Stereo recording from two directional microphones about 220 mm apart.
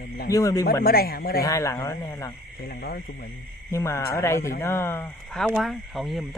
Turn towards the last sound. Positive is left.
turn(degrees=0)  # may be behind; listen again after turning